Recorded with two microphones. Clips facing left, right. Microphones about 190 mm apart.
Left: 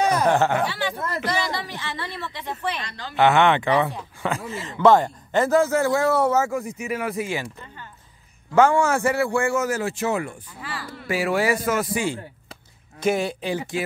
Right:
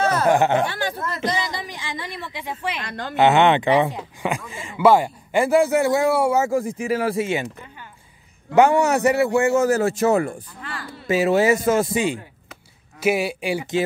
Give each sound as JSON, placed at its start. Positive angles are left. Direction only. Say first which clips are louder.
{"t": 0.0, "sound": "a sound", "louder": "even", "side_deg": 15}
{"t": 0.3, "sound": "a man's voice", "louder": "right 6 dB", "side_deg": -15}
{"t": 0.7, "sound": "speech", "louder": "right 1 dB", "side_deg": -45}
{"t": 1.2, "sound": "a man's voice", "louder": "right 2 dB", "side_deg": -20}
{"t": 2.8, "sound": "speech", "louder": "right 5 dB", "side_deg": -55}
{"t": 3.2, "sound": "a man's voice", "louder": "right 2 dB", "side_deg": -20}
{"t": 6.8, "sound": "speech", "louder": "right 5 dB", "side_deg": -30}
{"t": 8.5, "sound": "speech", "louder": "right 2 dB", "side_deg": -20}
{"t": 9.7, "sound": "speech", "louder": "right 6 dB", "side_deg": -45}
{"t": 10.6, "sound": "speech", "louder": "left 3 dB", "side_deg": 5}
{"t": 11.1, "sound": "speech", "louder": "right 5 dB", "side_deg": -20}
{"t": 13.0, "sound": "a man's voice", "louder": "right 2 dB", "side_deg": -10}